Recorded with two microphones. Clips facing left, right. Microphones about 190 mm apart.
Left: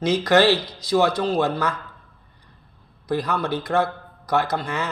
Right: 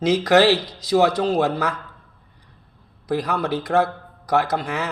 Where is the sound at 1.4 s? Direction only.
5° right (ahead or behind).